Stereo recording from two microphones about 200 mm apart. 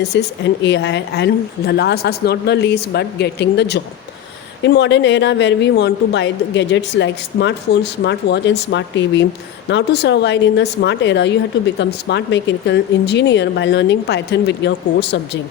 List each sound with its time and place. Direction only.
0.0 s a woman's voice: 60° left (ahead or behind)